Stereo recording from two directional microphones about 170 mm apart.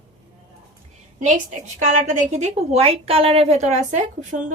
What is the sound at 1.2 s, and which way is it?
Speech, 45° right (ahead or behind).